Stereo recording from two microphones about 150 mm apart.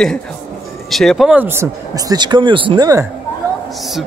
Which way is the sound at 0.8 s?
Centre (ahead or behind).